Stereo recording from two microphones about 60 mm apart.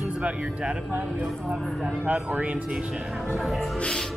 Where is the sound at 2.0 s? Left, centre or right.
Right.